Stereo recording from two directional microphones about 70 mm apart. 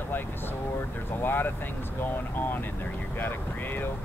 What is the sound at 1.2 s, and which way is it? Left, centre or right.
Speech, left.